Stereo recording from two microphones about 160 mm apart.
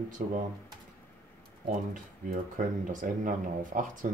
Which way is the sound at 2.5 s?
55° right (ahead or behind).